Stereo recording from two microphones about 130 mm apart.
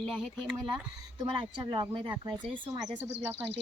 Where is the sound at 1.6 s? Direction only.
35° right (ahead or behind).